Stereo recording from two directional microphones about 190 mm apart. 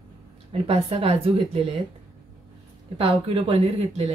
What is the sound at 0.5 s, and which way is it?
Speech, 30° right (ahead or behind).